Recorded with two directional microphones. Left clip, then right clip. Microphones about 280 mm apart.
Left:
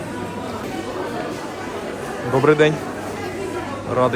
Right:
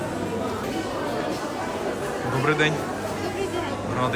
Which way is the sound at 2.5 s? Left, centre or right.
Centre.